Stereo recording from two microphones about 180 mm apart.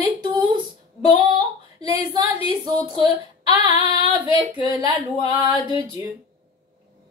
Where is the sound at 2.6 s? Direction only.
25° right (ahead or behind).